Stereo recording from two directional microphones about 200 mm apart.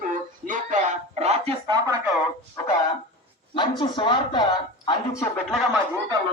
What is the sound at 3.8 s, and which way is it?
Speech, 25° left (ahead or behind).